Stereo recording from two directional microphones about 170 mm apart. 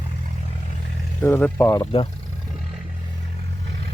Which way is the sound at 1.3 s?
15° left (ahead or behind).